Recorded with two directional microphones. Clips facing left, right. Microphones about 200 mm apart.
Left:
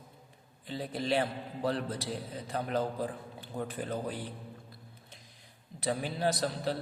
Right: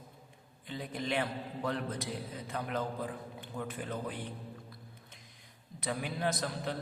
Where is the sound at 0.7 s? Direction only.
35° left (ahead or behind).